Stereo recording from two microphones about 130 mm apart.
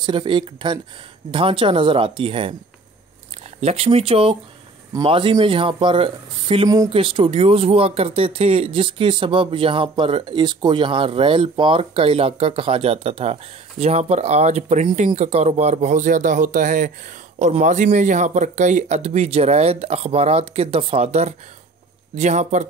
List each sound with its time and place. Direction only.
0.0 s speech: 40° right (ahead or behind)
3.6 s speech: 50° right (ahead or behind); by 16.9 s 80° right
17.4 s speech: 65° right (ahead or behind)